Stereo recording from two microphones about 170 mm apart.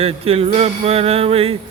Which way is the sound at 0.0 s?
35° right (ahead or behind).